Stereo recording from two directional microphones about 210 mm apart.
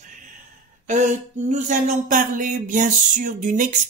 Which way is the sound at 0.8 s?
35° right (ahead or behind).